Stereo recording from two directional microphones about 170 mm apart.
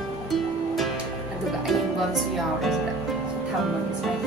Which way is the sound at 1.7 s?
Centre (ahead or behind).